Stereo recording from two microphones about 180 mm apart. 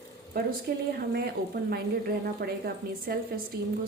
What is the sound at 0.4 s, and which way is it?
Speech, 55° right (ahead or behind).